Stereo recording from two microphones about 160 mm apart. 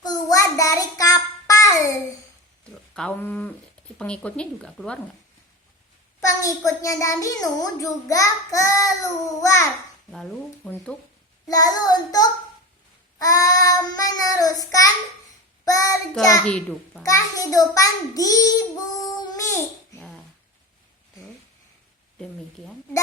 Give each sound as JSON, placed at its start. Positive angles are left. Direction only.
{"t": 0.0, "sound": "child singing", "side_deg": 25}
{"t": 2.9, "sound": "speech", "side_deg": 5}
{"t": 6.1, "sound": "a child's voice", "side_deg": 20}
{"t": 10.1, "sound": "speech", "side_deg": 0}
{"t": 11.4, "sound": "a child's voice", "side_deg": 25}
{"t": 16.5, "sound": "speech", "side_deg": 5}
{"t": 17.0, "sound": "a child's voice", "side_deg": 20}